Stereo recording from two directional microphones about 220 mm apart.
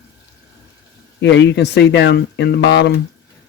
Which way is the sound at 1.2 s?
55° left (ahead or behind).